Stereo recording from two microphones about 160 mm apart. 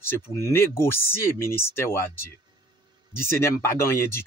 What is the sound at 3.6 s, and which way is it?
Speech, 15° left (ahead or behind).